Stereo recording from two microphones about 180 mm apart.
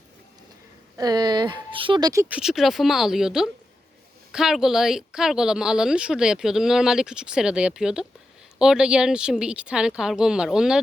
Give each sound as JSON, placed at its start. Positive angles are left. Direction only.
{"t": 0.9, "sound": "speech", "side_deg": -20}
{"t": 2.2, "sound": "speech", "side_deg": -5}